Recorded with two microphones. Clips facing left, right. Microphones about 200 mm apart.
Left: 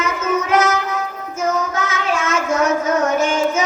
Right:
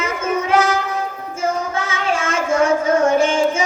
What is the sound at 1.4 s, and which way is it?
Child singing, 30° right (ahead or behind).